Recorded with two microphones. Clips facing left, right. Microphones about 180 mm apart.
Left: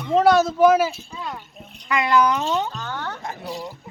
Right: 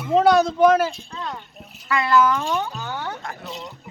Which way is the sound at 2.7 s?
10° right (ahead or behind).